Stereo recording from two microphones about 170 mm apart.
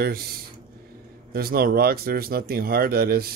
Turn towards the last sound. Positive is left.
turn(degrees=-65)  # may be behind; listen again after turning